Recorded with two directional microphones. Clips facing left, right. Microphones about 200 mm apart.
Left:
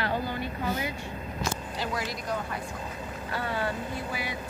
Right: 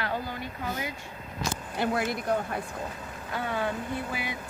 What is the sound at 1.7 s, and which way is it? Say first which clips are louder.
Speech: right 5 dB; 55° right (ahead or behind).